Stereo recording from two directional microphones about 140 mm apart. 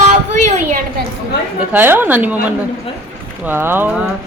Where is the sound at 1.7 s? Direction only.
15° right (ahead or behind).